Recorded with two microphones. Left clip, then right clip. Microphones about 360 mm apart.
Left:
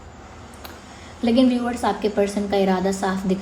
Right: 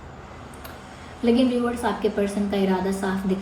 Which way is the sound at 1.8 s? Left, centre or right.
Left.